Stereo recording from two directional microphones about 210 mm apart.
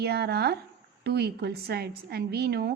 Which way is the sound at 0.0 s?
50° right (ahead or behind).